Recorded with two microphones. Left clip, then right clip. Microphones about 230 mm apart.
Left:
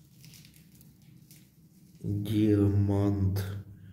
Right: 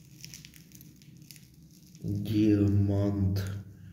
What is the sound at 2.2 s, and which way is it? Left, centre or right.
Music, centre.